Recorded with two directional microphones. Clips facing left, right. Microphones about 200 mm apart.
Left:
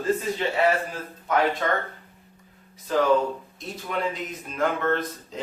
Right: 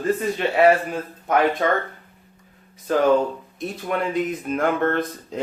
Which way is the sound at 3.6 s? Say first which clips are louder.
Right 5 dB; 55° right (ahead or behind).